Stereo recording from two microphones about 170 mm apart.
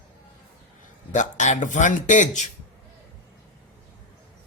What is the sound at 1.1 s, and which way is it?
Speech, 45° left (ahead or behind).